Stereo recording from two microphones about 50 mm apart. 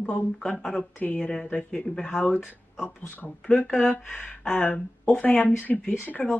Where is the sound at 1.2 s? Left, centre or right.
Centre.